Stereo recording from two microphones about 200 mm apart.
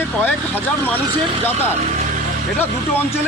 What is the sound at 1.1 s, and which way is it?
Speech, 25° right (ahead or behind).